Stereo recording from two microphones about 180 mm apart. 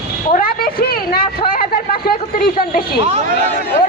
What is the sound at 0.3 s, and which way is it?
A woman's voice, 55° left (ahead or behind).